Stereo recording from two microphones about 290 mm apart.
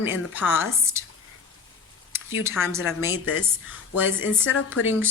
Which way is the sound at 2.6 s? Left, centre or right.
Centre.